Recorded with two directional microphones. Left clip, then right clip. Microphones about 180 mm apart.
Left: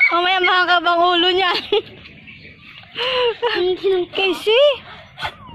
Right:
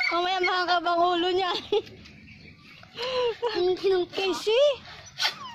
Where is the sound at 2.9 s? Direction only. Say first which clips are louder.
Left 9 dB; centre (ahead or behind).